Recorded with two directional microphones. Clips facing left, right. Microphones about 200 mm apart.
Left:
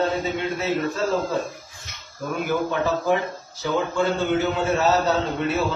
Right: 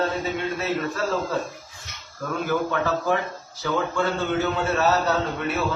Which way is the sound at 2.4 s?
15° left (ahead or behind).